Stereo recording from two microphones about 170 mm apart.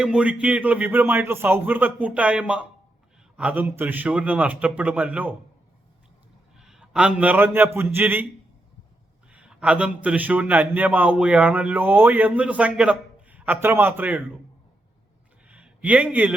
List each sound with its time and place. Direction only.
0.0 s a man's voice: 5° right (ahead or behind)
6.6 s a man's voice: 5° right (ahead or behind)
9.3 s a man's voice: 5° right (ahead or behind)
15.4 s a sound: 10° right (ahead or behind)